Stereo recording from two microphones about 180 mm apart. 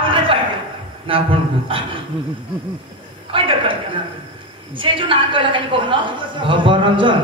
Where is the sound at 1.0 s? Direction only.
30° right (ahead or behind).